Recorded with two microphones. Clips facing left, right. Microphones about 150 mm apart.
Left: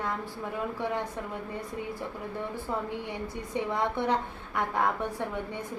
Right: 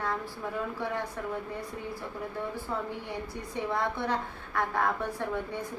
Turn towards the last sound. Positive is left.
turn(degrees=20)  # may be behind; listen again after turning